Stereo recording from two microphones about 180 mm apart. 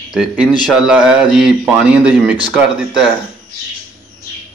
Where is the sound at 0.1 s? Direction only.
5° right (ahead or behind).